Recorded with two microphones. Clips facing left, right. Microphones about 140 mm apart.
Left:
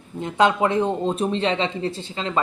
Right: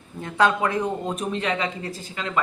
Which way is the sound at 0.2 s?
20° left (ahead or behind).